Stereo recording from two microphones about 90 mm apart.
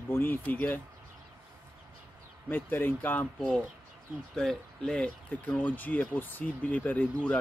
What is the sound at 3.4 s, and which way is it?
Speech, 10° left (ahead or behind).